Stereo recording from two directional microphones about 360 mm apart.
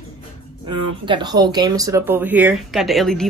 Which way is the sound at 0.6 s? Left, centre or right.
Centre.